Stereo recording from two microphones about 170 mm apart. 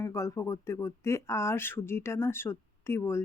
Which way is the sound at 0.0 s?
15° left (ahead or behind).